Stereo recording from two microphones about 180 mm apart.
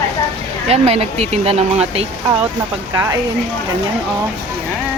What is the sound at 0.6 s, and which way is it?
Speech, 35° right (ahead or behind).